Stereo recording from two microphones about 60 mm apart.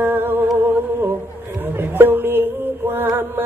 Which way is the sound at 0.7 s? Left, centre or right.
Right.